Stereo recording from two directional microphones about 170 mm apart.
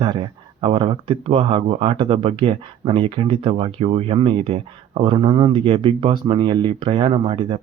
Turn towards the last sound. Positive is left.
turn(degrees=-30)  # may be behind; listen again after turning